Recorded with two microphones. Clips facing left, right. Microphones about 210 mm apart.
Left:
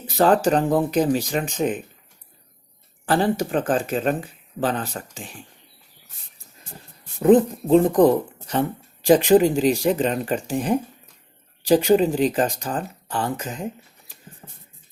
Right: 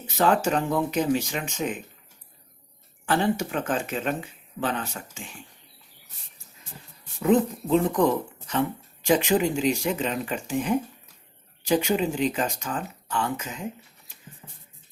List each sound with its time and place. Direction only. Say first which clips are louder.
0.0 s speech: left 5 dB; 35° left (ahead or behind)
3.1 s speech: left 4 dB; 35° left (ahead or behind)
7.2 s speech: left 6 dB; 35° left (ahead or behind)